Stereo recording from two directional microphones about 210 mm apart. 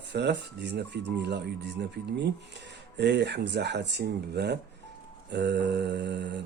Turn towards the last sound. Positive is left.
turn(degrees=-55)  # may be behind; listen again after turning